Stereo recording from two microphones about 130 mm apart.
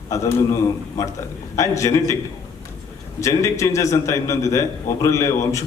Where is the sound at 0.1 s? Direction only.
25° left (ahead or behind).